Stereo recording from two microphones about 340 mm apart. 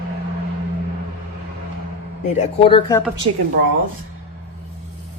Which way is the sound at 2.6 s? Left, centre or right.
Centre.